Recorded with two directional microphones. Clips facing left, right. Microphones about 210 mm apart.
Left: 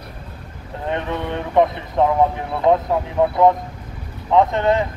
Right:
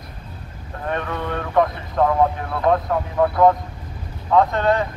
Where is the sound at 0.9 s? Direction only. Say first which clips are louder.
Left 1 dB; 20° left (ahead or behind).